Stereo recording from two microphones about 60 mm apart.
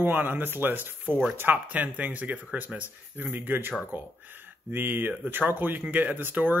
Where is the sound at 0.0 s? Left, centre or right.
Right.